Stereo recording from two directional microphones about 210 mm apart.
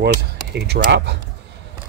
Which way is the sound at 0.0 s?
50° right (ahead or behind).